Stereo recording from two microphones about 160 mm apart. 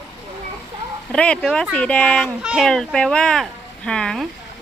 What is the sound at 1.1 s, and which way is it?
A child's voice, 5° left (ahead or behind).